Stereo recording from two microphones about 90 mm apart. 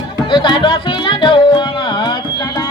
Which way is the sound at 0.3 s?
60° left (ahead or behind).